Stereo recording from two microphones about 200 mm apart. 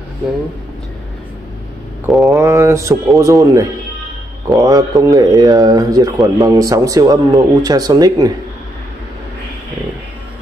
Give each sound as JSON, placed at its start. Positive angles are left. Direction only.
{"t": 2.2, "sound": "speech", "side_deg": -15}